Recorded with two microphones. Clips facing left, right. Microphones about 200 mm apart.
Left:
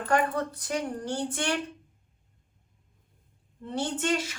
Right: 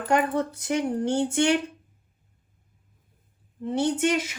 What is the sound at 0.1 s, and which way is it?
A woman's voice, 25° right (ahead or behind).